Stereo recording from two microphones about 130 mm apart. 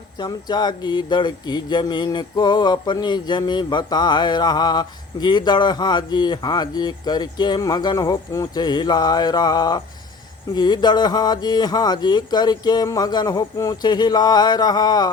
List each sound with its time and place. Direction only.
0.2 s speech: 35° left (ahead or behind)